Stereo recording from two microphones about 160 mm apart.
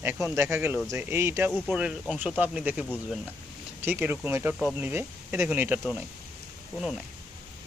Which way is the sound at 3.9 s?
10° right (ahead or behind).